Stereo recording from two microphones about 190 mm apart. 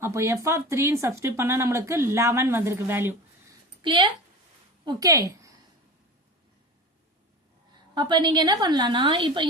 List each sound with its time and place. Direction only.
0.0 s speech: 15° right (ahead or behind)
3.8 s a woman's voice: 25° right (ahead or behind)
7.7 s a woman's voice: 25° right (ahead or behind)